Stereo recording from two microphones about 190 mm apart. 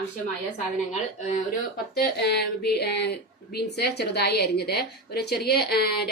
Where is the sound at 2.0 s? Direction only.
60° left (ahead or behind).